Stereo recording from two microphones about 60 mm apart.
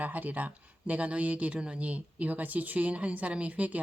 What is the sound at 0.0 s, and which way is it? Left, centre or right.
Speech, right.